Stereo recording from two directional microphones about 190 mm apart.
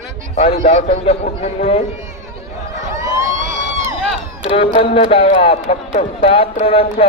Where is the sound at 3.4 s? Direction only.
40° right (ahead or behind).